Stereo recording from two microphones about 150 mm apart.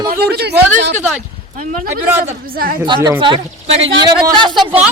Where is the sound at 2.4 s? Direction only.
75° right (ahead or behind).